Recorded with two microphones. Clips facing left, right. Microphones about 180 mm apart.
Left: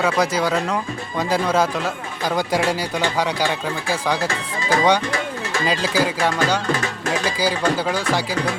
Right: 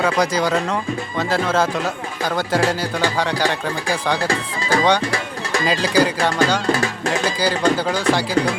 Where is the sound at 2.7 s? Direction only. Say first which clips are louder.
Right 1 dB; 10° left (ahead or behind).